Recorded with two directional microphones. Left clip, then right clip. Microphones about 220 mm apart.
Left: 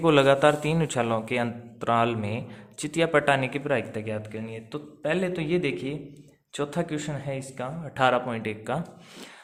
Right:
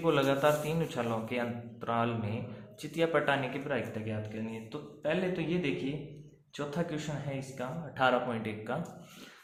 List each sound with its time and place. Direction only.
0.0 s speech: 50° left (ahead or behind)